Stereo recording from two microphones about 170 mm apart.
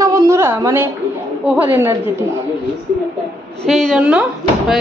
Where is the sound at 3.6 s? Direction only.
Centre (ahead or behind).